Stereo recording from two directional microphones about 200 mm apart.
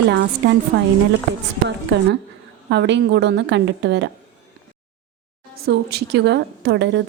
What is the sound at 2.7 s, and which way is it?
A woman's voice, 60° right (ahead or behind).